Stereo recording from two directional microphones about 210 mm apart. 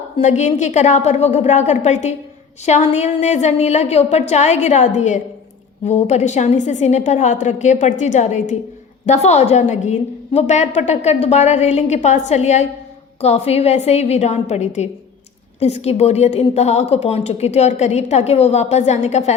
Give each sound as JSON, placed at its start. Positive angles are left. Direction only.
{"t": 0.2, "sound": "a woman's voice", "side_deg": 35}